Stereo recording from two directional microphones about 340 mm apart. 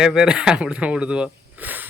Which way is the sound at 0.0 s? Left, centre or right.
Centre.